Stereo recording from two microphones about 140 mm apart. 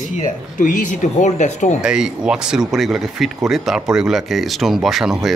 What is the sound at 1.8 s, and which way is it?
Speech, 5° right (ahead or behind).